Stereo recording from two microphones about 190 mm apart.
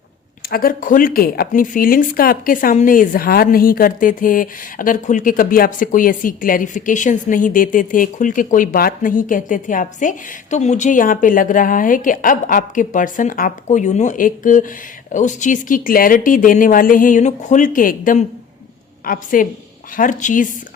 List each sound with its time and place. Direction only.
0.4 s speech: 50° left (ahead or behind)